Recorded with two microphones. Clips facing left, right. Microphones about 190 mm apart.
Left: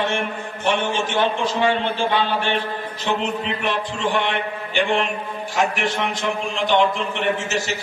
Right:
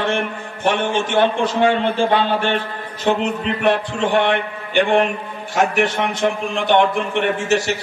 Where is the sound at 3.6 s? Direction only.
55° right (ahead or behind).